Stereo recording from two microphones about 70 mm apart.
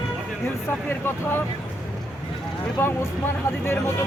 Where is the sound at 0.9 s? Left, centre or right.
Left.